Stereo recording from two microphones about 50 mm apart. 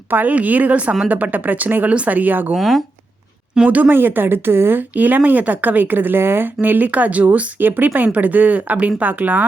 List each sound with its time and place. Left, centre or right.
0.1 s speech: right
1.9 s speech: right
2.1 s speech: right
2.6 s speech: centre
3.7 s speech: right
3.9 s speech: right